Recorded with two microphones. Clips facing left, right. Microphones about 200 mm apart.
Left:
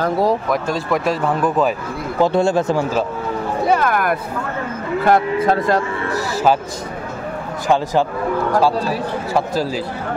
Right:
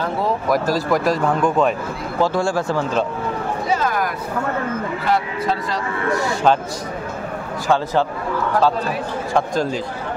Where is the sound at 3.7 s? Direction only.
60° left (ahead or behind).